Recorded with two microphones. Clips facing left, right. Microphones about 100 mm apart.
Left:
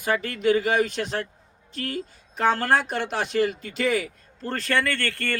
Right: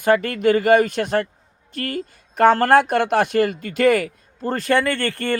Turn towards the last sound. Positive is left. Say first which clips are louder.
# right 6 dB
turn(degrees=-20)  # may be behind; listen again after turning